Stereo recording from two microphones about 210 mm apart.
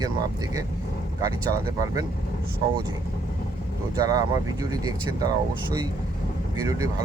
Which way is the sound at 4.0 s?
15° right (ahead or behind).